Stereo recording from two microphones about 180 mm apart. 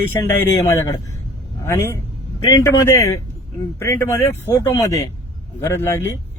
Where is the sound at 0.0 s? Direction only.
15° left (ahead or behind).